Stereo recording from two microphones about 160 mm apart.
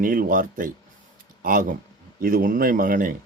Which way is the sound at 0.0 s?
60° right (ahead or behind).